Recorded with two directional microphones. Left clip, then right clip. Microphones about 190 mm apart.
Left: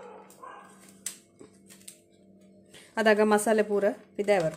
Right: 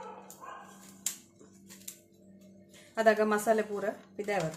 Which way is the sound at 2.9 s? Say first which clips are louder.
Left 4 dB; 45° left (ahead or behind).